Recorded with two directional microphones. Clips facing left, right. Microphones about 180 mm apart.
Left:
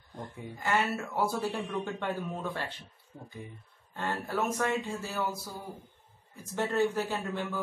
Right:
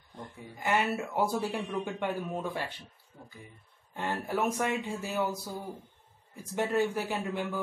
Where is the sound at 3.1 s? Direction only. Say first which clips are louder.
Left 4 dB; 30° left (ahead or behind).